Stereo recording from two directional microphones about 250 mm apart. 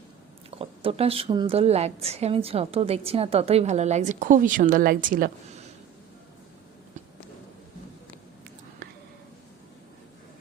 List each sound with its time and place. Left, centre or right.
0.6 s a woman's voice: right